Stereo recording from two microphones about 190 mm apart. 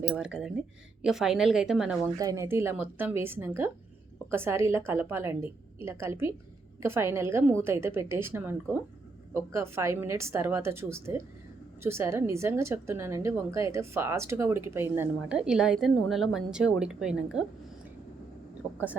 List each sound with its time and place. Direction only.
0.1 s a woman's voice: 5° right (ahead or behind)
2.1 s a woman's voice: 15° right (ahead or behind)